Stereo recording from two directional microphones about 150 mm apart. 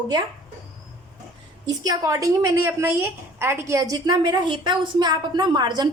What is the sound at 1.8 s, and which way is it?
A woman's voice, 25° right (ahead or behind).